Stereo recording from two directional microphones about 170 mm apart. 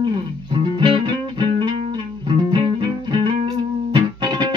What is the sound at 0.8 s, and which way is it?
Music, 30° right (ahead or behind).